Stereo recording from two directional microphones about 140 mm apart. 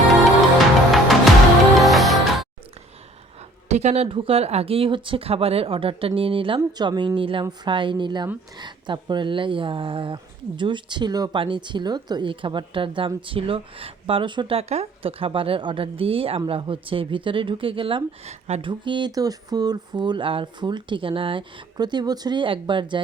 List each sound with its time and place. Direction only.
0.9 s music: centre (ahead or behind)
3.7 s speech: 50° right (ahead or behind)
18.7 s speech: 35° right (ahead or behind)